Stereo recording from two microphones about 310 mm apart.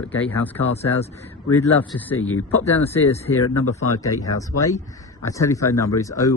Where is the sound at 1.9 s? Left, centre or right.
Centre.